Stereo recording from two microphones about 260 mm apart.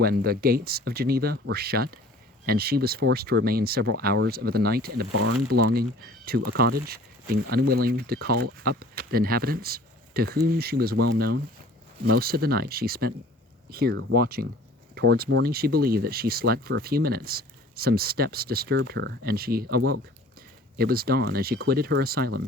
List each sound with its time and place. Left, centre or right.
0.0 s speech: right
10.9 s speech: right
12.1 s speech: right